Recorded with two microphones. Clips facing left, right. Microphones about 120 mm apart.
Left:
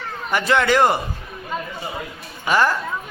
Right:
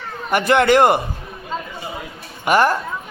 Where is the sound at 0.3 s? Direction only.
55° right (ahead or behind).